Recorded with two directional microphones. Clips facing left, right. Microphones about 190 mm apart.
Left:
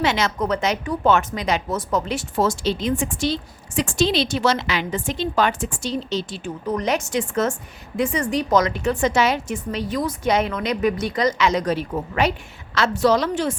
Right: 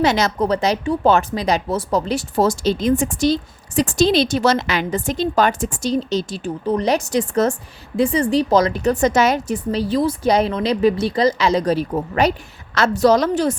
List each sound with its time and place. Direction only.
0.0 s speech: 40° right (ahead or behind)